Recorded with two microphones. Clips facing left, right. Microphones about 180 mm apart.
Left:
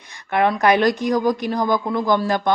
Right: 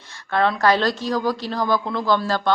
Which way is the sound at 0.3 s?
15° left (ahead or behind).